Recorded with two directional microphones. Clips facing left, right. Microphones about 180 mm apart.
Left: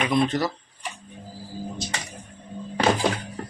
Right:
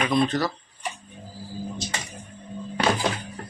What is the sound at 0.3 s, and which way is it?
Speech, 25° left (ahead or behind).